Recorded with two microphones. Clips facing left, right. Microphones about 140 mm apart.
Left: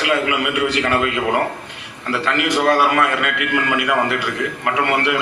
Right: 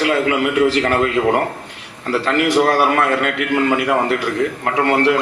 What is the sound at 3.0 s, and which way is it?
A man's voice, 35° right (ahead or behind).